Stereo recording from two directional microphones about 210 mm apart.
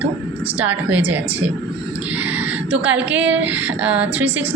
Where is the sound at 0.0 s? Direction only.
5° right (ahead or behind).